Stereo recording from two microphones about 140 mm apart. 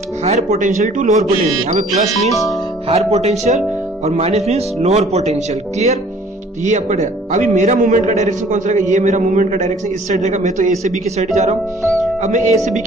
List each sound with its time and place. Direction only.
0.2 s a man's voice: 50° right (ahead or behind)
2.9 s a man's voice: 50° right (ahead or behind)